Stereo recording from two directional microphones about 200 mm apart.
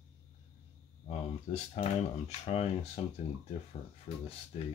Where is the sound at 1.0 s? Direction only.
35° left (ahead or behind).